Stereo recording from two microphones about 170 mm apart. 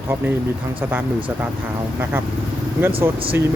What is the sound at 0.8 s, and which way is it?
Speech, 10° right (ahead or behind).